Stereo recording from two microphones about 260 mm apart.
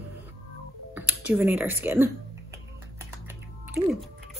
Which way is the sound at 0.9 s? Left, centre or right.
Centre.